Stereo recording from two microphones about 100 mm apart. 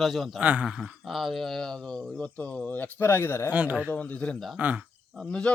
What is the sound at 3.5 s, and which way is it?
Speech, 15° right (ahead or behind).